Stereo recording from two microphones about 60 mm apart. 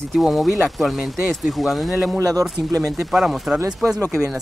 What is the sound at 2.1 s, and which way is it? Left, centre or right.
Speech, right.